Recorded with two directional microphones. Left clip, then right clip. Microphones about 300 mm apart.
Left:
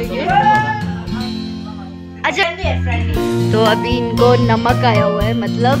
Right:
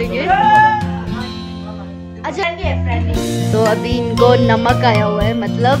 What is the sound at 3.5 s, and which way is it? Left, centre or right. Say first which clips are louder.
Speech: even; centre.